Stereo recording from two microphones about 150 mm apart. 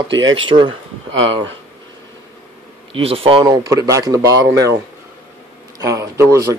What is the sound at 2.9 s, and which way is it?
Speech, 40° right (ahead or behind).